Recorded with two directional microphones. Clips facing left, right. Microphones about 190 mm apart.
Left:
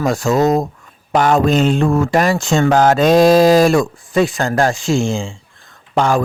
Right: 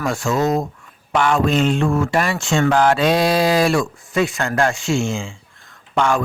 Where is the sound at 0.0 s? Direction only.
40° left (ahead or behind).